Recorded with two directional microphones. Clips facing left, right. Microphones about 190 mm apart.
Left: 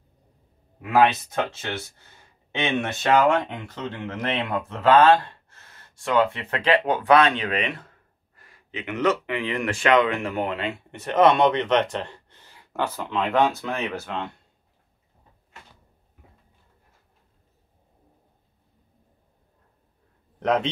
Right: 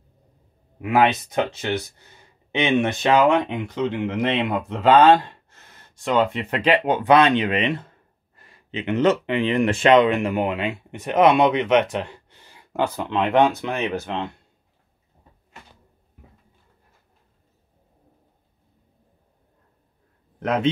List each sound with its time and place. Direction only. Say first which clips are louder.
0.8 s speech: right 1 dB; 15° right (ahead or behind)
20.3 s a man's voice: right 2 dB; 5° right (ahead or behind)